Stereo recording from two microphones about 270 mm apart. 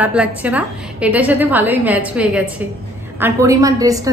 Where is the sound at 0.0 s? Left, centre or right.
Centre.